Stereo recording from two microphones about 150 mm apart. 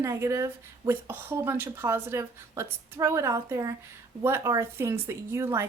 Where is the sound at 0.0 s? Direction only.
20° right (ahead or behind).